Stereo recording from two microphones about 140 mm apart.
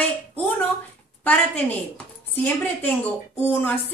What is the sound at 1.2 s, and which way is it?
A woman's voice, 10° left (ahead or behind).